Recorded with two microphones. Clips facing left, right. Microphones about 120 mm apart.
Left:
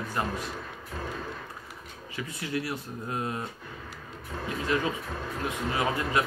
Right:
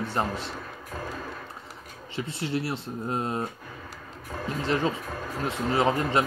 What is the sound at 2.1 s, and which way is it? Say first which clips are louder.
Speech: right 3 dB; 30° right (ahead or behind).